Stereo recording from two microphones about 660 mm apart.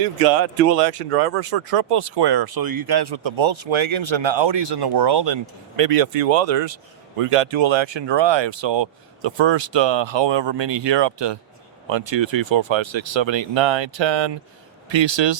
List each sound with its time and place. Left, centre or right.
1.1 s speech: right